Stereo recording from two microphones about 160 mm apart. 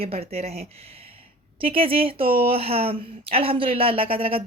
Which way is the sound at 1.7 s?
35° right (ahead or behind).